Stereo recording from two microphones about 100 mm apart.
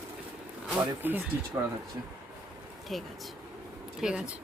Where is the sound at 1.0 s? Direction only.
20° right (ahead or behind).